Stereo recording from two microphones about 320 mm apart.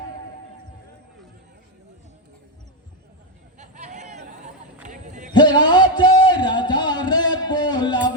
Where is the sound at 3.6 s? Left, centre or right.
Right.